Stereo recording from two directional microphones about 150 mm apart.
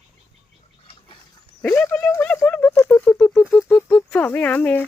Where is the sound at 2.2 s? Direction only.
10° left (ahead or behind).